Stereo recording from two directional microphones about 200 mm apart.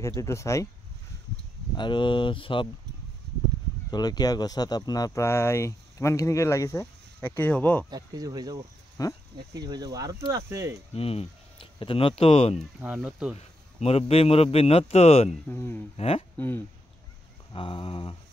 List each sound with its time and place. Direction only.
0.0 s speech: 15° left (ahead or behind)
1.8 s speech: 25° left (ahead or behind)
3.9 s speech: 20° left (ahead or behind)
7.9 s speech: 20° right (ahead or behind)
9.0 s speech: 15° left (ahead or behind)
9.5 s speech: 20° right (ahead or behind)
11.0 s speech: 30° left (ahead or behind)
12.5 s speech: 5° right (ahead or behind)
13.4 s a man's voice: 30° left (ahead or behind)
15.4 s speech: 10° left (ahead or behind)
16.0 s speech: 30° left (ahead or behind)
16.3 s speech: 10° left (ahead or behind)
17.5 s speech: 25° left (ahead or behind)